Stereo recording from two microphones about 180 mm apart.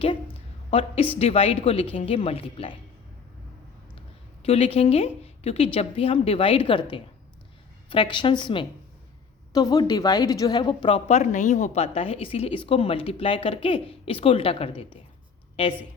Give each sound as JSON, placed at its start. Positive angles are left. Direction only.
{"t": 0.7, "sound": "a woman's voice", "side_deg": 30}
{"t": 4.4, "sound": "a woman's voice", "side_deg": 35}
{"t": 7.9, "sound": "a woman's voice", "side_deg": 25}
{"t": 10.8, "sound": "a woman's voice", "side_deg": 35}